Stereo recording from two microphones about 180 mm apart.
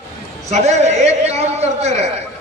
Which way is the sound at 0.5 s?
40° right (ahead or behind).